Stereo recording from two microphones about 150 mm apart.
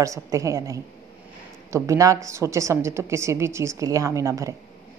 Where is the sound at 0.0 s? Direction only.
20° right (ahead or behind).